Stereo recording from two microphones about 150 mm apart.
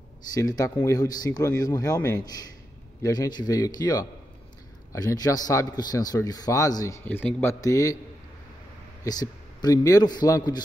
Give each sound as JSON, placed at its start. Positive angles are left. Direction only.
{"t": 0.3, "sound": "speech", "side_deg": 25}
{"t": 7.6, "sound": "speech", "side_deg": 20}
{"t": 9.0, "sound": "a man's voice", "side_deg": 25}